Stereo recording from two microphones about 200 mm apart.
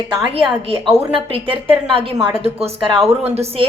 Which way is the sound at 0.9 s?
30° right (ahead or behind).